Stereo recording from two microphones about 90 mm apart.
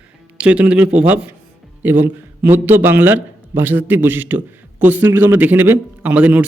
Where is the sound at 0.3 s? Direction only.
15° right (ahead or behind).